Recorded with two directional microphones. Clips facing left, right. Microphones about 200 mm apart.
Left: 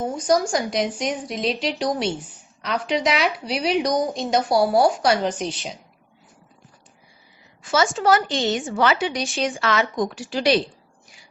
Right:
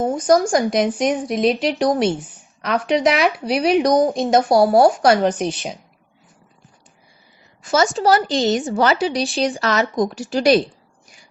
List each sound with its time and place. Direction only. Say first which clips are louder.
0.2 s a woman's voice: right 4 dB; 50° right (ahead or behind)
7.6 s a woman's voice: right 3 dB; 40° right (ahead or behind)